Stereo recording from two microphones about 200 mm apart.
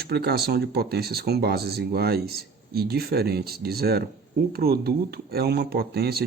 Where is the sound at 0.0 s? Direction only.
55° right (ahead or behind).